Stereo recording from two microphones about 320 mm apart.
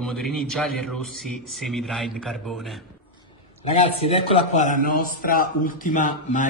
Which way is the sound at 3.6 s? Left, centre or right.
Centre.